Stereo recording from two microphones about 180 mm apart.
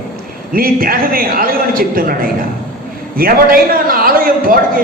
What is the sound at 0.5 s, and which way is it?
A man's voice, 55° right (ahead or behind).